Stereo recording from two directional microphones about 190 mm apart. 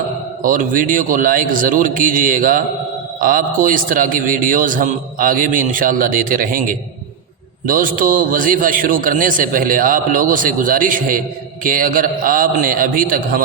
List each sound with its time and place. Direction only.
0.4 s a man's voice: 45° right (ahead or behind)